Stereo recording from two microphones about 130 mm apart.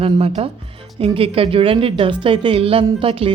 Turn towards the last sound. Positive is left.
turn(degrees=-45)  # may be behind; listen again after turning